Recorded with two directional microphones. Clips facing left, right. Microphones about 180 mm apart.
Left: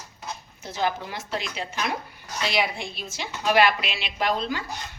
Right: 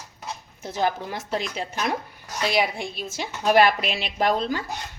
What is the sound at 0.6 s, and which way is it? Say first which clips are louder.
A woman's voice: right 2 dB; 45° right (ahead or behind).